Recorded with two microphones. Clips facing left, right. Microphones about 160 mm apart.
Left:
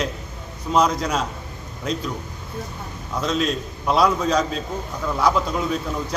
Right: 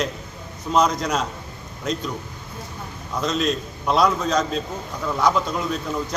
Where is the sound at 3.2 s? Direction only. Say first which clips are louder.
Even; 5° left (ahead or behind).